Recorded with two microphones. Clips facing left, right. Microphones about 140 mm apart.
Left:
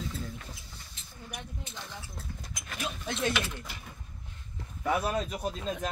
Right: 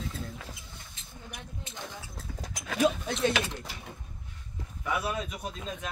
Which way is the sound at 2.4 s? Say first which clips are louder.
Right 13 dB; 85° right.